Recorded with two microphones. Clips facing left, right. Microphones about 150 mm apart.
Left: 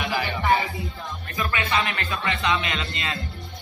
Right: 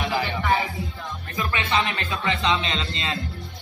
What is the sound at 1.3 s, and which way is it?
Music, 20° right (ahead or behind).